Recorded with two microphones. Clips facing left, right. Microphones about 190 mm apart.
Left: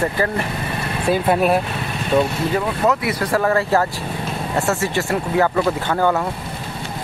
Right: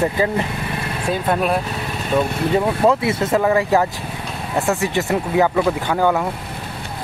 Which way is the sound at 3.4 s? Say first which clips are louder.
Even; 15° right (ahead or behind).